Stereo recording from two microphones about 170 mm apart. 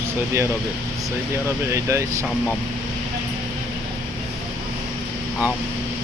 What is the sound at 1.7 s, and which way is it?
Speech, 15° right (ahead or behind).